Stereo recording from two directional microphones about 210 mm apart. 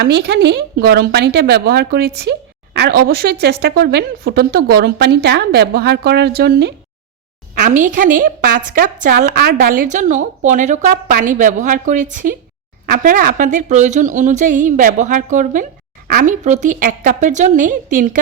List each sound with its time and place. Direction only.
0.0 s a woman's voice: 50° right (ahead or behind)
7.5 s a woman's voice: 35° right (ahead or behind)